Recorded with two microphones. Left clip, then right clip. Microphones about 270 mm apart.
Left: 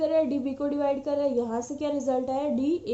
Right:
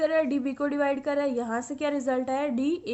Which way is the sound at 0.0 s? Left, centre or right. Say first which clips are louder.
Even; right.